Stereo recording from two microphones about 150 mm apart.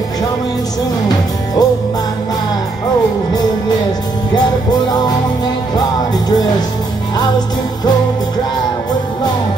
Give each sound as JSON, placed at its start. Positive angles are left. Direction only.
{"t": 1.0, "sound": "music", "side_deg": 25}
{"t": 4.8, "sound": "music", "side_deg": 25}